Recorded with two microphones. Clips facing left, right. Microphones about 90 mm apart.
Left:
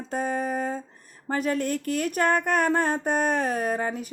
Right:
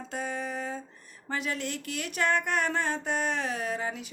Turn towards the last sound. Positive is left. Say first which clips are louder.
# left 6 dB
turn(degrees=45)  # may be behind; listen again after turning